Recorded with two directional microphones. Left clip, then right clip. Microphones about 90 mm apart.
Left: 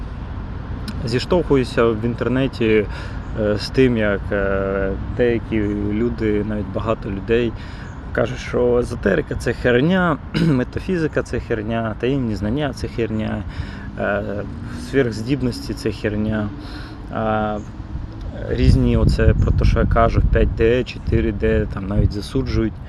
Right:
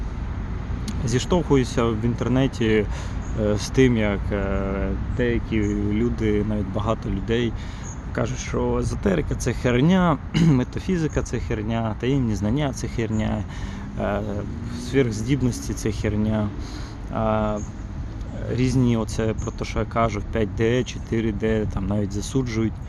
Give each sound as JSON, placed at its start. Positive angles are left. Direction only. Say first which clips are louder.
{"t": 1.3, "sound": "speech", "louder": "left 4 dB", "side_deg": -25}
{"t": 8.1, "sound": "speech", "louder": "left 7 dB", "side_deg": -20}
{"t": 9.3, "sound": "speech", "louder": "left 6 dB", "side_deg": -40}
{"t": 18.5, "sound": "speech", "louder": "left 3 dB", "side_deg": -40}